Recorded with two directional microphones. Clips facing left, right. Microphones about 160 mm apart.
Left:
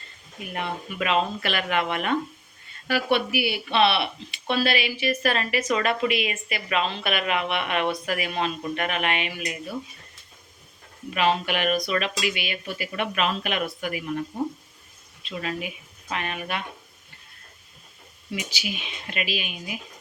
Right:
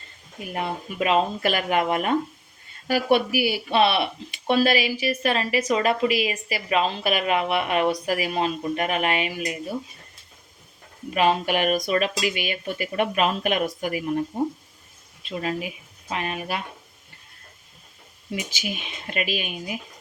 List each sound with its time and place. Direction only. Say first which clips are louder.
0.5 s speech: right 2 dB; 35° right (ahead or behind)
11.1 s speech: right 2 dB; 40° right (ahead or behind)
15.3 s speech: right 3 dB; 35° right (ahead or behind)
18.3 s speech: right 2 dB; 45° right (ahead or behind)